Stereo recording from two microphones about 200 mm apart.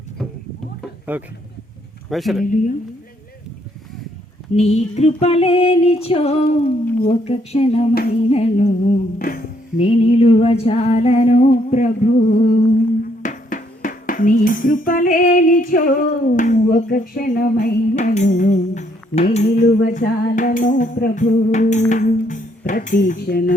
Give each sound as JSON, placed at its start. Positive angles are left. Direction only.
{"t": 1.1, "sound": "speech", "side_deg": -10}
{"t": 4.5, "sound": "music", "side_deg": 35}
{"t": 9.7, "sound": "music", "side_deg": 30}
{"t": 19.6, "sound": "music", "side_deg": 45}
{"t": 22.3, "sound": "speech", "side_deg": 40}